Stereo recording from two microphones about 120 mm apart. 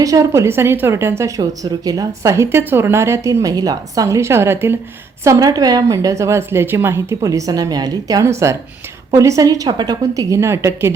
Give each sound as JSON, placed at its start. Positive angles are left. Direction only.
{"t": 0.0, "sound": "a woman's voice", "side_deg": -25}